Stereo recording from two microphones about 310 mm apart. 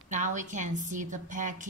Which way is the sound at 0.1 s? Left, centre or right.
Right.